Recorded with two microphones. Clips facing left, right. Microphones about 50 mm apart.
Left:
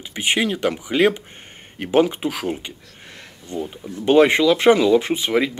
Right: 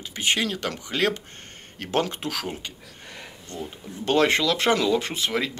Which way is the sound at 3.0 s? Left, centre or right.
Centre.